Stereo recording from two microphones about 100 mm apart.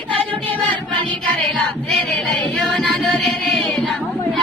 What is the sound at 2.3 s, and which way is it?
Music, 5° left (ahead or behind).